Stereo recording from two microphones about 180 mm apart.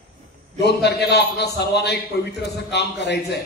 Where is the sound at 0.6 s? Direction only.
65° left (ahead or behind).